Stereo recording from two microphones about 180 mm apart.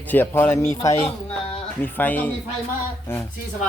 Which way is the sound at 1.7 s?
10° left (ahead or behind).